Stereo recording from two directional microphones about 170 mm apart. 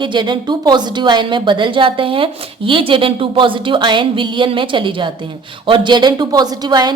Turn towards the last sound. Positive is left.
turn(degrees=-25)  # may be behind; listen again after turning